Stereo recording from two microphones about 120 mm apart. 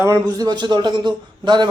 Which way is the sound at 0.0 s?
30° right (ahead or behind).